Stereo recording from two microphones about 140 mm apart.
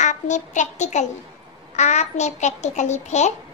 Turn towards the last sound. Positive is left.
turn(degrees=55)  # may be behind; listen again after turning